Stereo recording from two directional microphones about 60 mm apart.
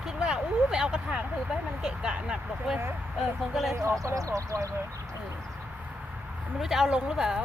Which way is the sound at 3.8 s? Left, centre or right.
Right.